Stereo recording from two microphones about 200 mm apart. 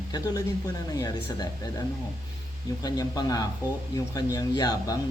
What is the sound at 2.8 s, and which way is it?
Speech, 20° left (ahead or behind).